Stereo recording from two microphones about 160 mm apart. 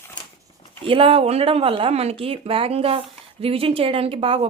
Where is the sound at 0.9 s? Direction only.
35° right (ahead or behind).